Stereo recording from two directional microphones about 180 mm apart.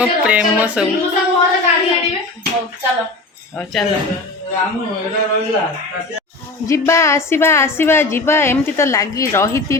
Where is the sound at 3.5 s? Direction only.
5° left (ahead or behind).